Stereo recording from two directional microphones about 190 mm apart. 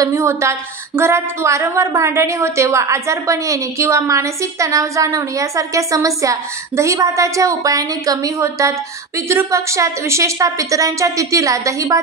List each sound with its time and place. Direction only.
0.0 s speech: 15° right (ahead or behind)